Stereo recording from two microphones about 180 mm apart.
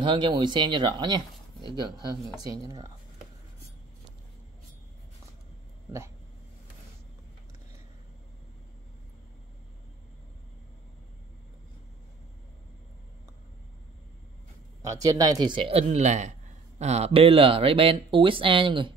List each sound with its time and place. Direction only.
0.0 s a man's voice: 25° right (ahead or behind)
14.8 s a man's voice: 20° right (ahead or behind)